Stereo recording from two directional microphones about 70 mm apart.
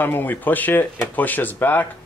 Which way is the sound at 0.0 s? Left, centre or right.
Left.